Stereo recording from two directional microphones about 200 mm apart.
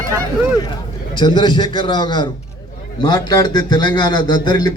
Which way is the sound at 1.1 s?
20° left (ahead or behind).